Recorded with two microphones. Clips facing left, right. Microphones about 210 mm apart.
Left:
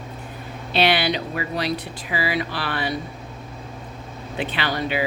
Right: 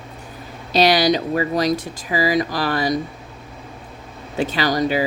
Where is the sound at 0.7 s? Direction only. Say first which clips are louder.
Right 5 dB; 40° right (ahead or behind).